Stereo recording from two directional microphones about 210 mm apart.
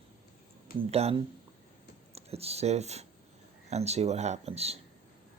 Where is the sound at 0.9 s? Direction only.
30° right (ahead or behind).